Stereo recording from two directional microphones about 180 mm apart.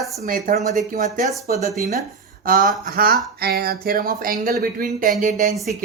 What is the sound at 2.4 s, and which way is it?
Speech, 50° right (ahead or behind).